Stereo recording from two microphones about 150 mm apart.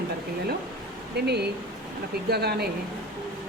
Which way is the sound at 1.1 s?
90° right.